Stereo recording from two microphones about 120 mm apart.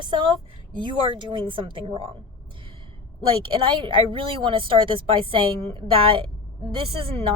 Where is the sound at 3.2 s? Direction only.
45° right (ahead or behind).